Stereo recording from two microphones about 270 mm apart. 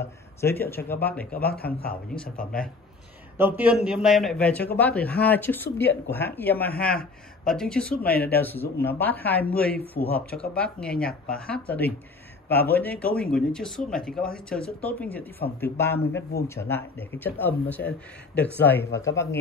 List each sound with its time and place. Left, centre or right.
0.4 s speech: centre
1.6 s speech: left
3.3 s a man's voice: centre